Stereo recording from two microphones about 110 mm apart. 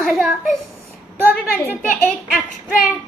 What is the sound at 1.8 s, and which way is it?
A child's voice, 10° left (ahead or behind).